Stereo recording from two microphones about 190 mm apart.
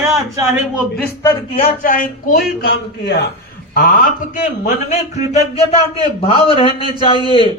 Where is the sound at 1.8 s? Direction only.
45° left (ahead or behind).